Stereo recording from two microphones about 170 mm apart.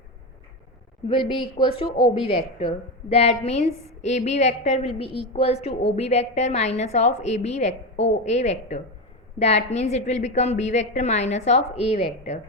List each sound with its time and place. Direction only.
1.0 s a woman's voice: 30° left (ahead or behind)